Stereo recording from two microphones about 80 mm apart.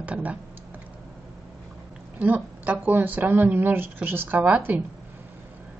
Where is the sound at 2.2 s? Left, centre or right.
Right.